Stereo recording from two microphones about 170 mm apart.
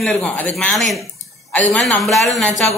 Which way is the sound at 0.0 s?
5° left (ahead or behind).